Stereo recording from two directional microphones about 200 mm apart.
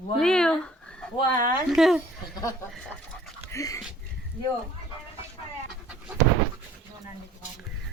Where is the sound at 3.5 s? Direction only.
15° left (ahead or behind).